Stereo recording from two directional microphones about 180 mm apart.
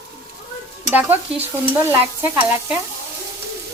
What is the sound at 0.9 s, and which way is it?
Stir, 10° right (ahead or behind).